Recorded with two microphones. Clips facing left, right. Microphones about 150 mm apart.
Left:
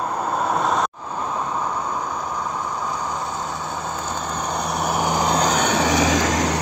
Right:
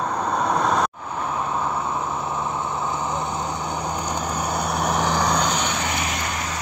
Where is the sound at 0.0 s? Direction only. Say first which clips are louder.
Even; 5° left (ahead or behind).